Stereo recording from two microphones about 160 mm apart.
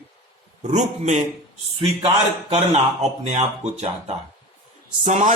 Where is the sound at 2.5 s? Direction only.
45° right (ahead or behind).